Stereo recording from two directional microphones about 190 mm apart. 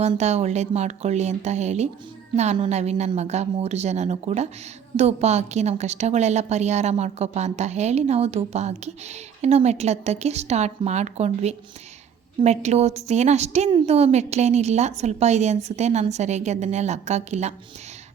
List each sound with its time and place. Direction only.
0.0 s a woman's voice: 35° right (ahead or behind)